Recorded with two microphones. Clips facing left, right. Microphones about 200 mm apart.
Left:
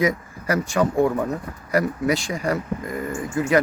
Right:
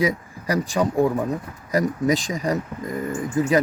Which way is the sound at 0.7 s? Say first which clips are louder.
Left 1 dB; 10° right (ahead or behind).